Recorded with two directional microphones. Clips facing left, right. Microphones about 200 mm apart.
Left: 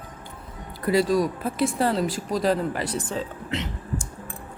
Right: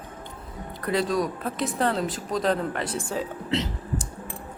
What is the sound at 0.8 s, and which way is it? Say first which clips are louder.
Speech: left 4 dB; 5° left (ahead or behind).